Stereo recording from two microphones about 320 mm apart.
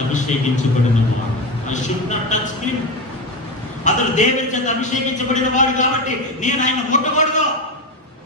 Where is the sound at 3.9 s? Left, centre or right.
Left.